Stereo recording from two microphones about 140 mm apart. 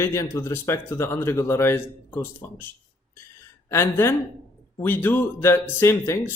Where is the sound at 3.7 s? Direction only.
15° left (ahead or behind).